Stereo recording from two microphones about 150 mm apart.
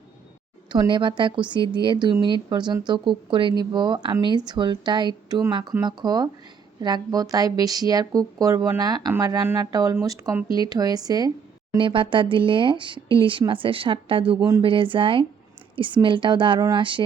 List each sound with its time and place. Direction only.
0.7 s speech: 30° right (ahead or behind)